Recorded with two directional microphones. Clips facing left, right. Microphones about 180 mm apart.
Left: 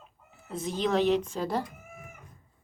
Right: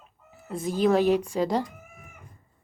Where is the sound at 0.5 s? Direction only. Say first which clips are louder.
Right 5 dB; centre (ahead or behind).